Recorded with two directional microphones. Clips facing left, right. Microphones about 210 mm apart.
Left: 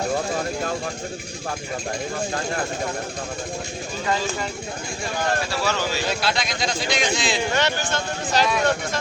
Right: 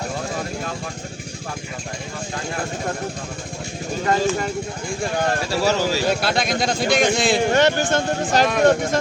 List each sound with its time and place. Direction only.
4.0 s a man's voice: 50° right (ahead or behind)
5.6 s speech: 40° right (ahead or behind)
6.2 s a man's voice: 55° right (ahead or behind)